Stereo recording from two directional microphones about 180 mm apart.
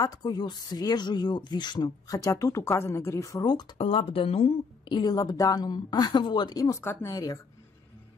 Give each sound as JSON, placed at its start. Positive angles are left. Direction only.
{"t": 0.0, "sound": "speech", "side_deg": 20}